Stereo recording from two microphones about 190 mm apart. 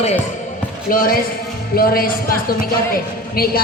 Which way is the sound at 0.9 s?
50° left (ahead or behind).